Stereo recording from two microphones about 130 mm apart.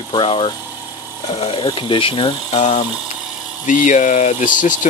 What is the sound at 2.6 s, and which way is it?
Speech, 55° left (ahead or behind).